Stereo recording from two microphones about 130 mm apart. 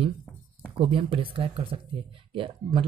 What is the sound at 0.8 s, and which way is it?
Speech, 45° right (ahead or behind).